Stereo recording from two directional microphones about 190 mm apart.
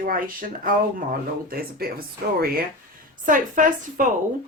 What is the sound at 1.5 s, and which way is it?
Speech, 50° right (ahead or behind).